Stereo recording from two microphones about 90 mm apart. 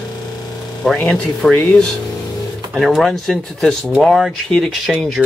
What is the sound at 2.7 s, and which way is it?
Speech, centre (ahead or behind).